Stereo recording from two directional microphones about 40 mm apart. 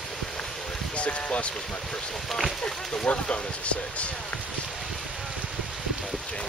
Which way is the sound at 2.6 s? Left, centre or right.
Left.